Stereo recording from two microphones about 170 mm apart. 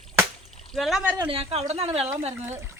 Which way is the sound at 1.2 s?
30° right (ahead or behind).